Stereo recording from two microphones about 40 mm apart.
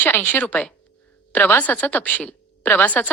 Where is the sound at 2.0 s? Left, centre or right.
Left.